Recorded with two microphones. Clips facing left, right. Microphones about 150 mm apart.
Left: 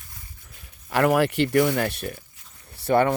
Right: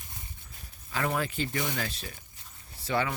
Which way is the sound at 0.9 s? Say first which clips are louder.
Left 11 dB; 70° left (ahead or behind).